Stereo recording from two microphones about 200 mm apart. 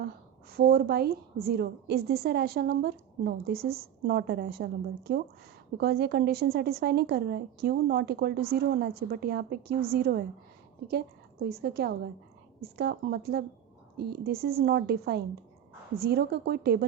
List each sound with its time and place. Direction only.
0.5 s a woman's voice: 50° right (ahead or behind)
11.4 s a woman's voice: 50° right (ahead or behind)